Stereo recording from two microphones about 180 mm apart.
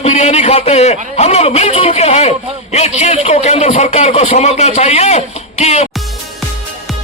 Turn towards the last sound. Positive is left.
turn(degrees=40)  # may be behind; listen again after turning